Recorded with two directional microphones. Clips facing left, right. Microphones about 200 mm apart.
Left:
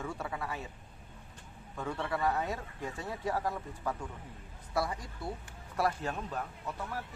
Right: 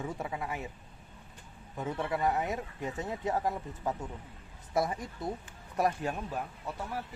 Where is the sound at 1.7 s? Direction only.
20° right (ahead or behind).